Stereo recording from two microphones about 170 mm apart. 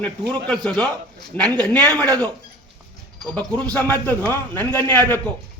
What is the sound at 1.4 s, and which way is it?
Speech, 25° right (ahead or behind).